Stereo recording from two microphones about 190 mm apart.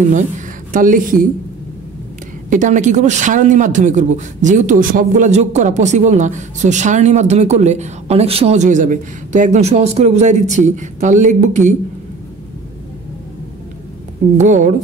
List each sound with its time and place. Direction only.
0.7 s speech: 45° right (ahead or behind)
2.5 s speech: 40° right (ahead or behind)
14.4 s speech: 40° right (ahead or behind)